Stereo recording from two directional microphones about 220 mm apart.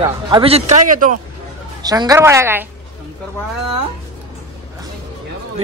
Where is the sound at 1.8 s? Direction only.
15° right (ahead or behind).